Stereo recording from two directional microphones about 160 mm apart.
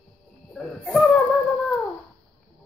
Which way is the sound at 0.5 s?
5° left (ahead or behind).